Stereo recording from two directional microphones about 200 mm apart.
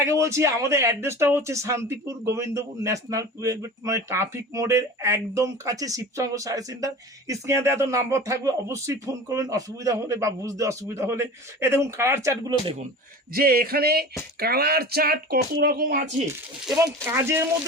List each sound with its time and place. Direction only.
0.0 s speech: 15° right (ahead or behind)
13.3 s speech: 50° right (ahead or behind)
16.7 s speech: 10° right (ahead or behind)